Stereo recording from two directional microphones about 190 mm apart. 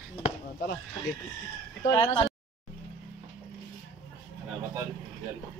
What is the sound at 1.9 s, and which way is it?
Speech, 25° left (ahead or behind).